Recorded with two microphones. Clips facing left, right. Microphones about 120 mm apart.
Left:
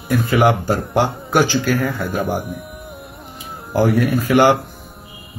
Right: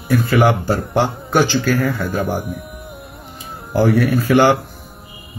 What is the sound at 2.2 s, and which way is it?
Speech, centre (ahead or behind).